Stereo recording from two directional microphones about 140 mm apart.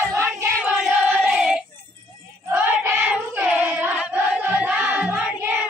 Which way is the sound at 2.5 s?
15° right (ahead or behind).